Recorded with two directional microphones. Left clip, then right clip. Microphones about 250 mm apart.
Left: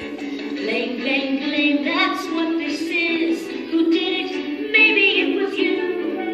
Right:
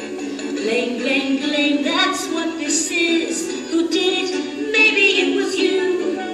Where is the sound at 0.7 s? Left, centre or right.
Right.